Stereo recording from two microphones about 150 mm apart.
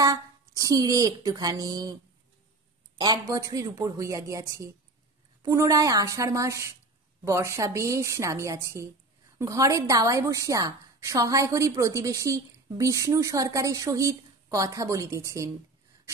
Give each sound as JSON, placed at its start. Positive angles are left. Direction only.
{"t": 0.0, "sound": "speech", "side_deg": -25}
{"t": 3.0, "sound": "a woman's voice", "side_deg": -25}